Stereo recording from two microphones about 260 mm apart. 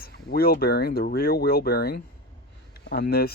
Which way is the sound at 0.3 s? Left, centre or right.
Left.